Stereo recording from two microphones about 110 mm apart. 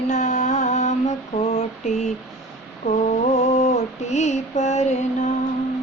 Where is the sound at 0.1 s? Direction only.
90° left.